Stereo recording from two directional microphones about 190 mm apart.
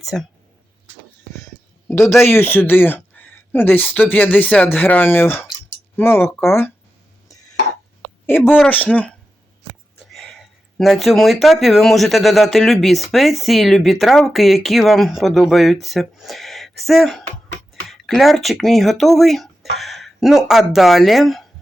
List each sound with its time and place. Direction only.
0.0 s speech: centre (ahead or behind)
2.0 s speech: 15° left (ahead or behind)
7.3 s a sound: 20° left (ahead or behind)
8.3 s speech: 10° left (ahead or behind)